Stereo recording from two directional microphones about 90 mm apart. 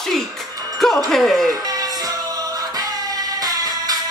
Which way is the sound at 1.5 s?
45° right (ahead or behind).